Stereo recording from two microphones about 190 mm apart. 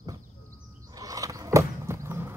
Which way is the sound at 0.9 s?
20° right (ahead or behind).